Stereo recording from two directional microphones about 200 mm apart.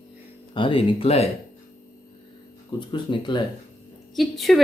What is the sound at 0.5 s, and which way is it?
Speech, 25° left (ahead or behind).